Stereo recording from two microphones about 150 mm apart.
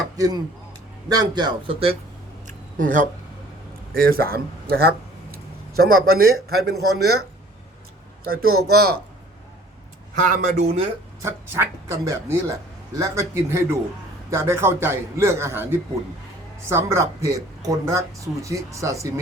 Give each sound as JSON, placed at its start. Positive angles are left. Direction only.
{"t": 0.2, "sound": "speech", "side_deg": -25}
{"t": 2.5, "sound": "a sound", "side_deg": -60}
{"t": 3.9, "sound": "a man's voice", "side_deg": -80}
{"t": 8.2, "sound": "speech", "side_deg": -85}
{"t": 10.2, "sound": "speech", "side_deg": -60}
{"t": 11.2, "sound": "a man's voice", "side_deg": -20}